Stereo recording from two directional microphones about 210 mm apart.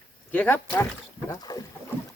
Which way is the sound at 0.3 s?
10° left (ahead or behind).